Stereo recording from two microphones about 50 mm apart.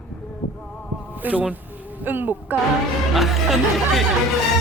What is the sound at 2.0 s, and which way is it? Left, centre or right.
Speech, right.